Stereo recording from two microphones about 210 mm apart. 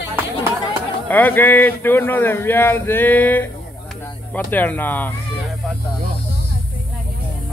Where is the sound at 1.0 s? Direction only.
10° left (ahead or behind).